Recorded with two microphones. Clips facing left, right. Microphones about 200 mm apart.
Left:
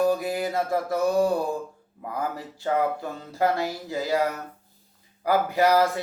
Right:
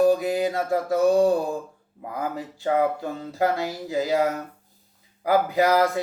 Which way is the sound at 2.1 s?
15° right (ahead or behind).